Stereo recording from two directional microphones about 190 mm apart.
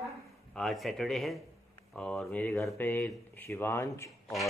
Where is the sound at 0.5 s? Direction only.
Centre (ahead or behind).